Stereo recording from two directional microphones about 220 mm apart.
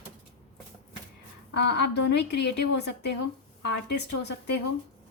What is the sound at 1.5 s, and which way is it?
A woman's voice, 50° left (ahead or behind).